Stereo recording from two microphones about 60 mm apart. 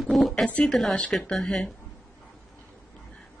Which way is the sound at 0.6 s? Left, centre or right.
Centre.